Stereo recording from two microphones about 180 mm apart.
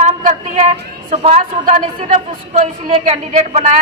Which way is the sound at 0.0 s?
40° right (ahead or behind).